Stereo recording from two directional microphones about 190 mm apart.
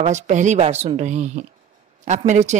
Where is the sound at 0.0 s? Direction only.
40° right (ahead or behind).